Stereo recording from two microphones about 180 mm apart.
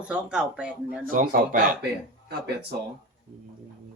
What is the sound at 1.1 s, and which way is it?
Speech, 50° right (ahead or behind).